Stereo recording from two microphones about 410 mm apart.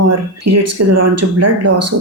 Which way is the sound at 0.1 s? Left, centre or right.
Right.